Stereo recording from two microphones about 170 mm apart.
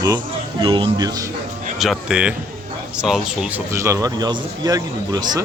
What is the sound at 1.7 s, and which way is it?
Speech, centre (ahead or behind).